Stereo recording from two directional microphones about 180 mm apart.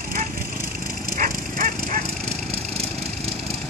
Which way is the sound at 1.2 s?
45° right (ahead or behind).